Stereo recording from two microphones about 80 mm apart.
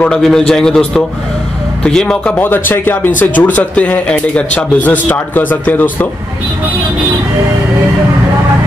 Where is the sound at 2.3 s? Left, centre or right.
Left.